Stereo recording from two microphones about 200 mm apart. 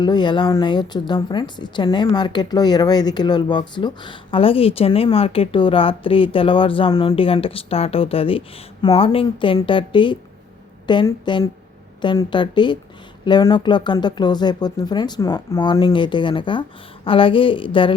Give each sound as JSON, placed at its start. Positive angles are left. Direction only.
{"t": 0.0, "sound": "speech", "side_deg": 20}